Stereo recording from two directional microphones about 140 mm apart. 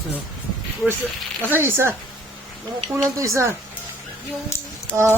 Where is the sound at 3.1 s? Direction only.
20° right (ahead or behind).